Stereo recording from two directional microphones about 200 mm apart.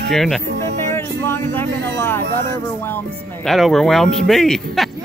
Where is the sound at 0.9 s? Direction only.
10° left (ahead or behind).